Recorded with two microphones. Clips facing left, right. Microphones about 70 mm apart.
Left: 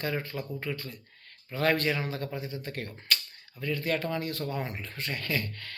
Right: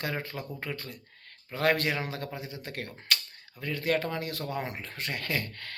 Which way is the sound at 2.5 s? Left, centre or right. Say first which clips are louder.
Left 2 dB; right.